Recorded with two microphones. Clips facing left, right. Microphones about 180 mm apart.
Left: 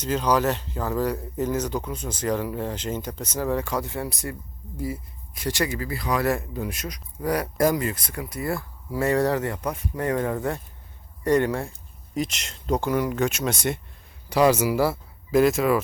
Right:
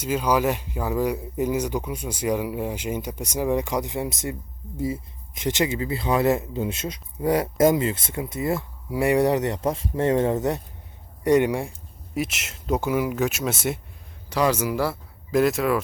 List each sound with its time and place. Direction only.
0.0 s speech: 10° right (ahead or behind)
14.3 s speech: 10° left (ahead or behind)